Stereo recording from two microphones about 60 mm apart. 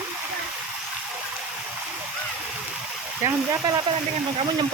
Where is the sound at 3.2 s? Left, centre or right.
Right.